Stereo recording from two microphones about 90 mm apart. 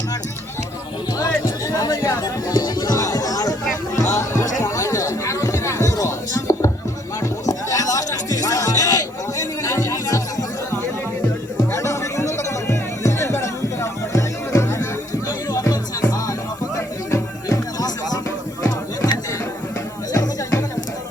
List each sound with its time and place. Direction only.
1.2 s music: 40° left (ahead or behind)
3.9 s chatter: 35° left (ahead or behind)
7.4 s music: 40° left (ahead or behind)
11.7 s music: 35° left (ahead or behind)
20.1 s music: 35° left (ahead or behind)